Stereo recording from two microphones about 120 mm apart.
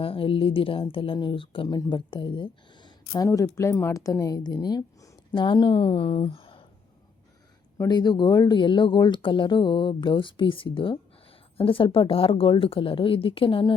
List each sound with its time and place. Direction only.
0.0 s speech: 50° left (ahead or behind)
3.1 s a woman's voice: 25° left (ahead or behind)
5.3 s speech: 40° left (ahead or behind)
7.9 s speech: 35° left (ahead or behind)